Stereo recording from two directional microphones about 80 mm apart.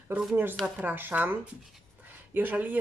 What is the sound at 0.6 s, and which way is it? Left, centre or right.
Speech, right.